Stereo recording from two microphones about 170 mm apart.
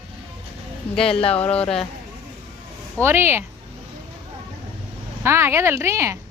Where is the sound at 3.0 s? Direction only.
15° right (ahead or behind).